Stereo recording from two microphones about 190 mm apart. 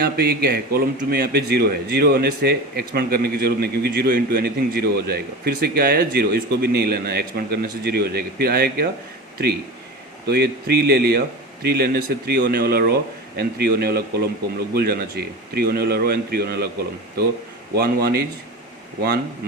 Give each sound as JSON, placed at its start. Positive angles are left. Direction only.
{"t": 0.0, "sound": "a man's voice", "side_deg": -55}
{"t": 10.2, "sound": "a man's voice", "side_deg": -60}
{"t": 17.7, "sound": "a man's voice", "side_deg": -55}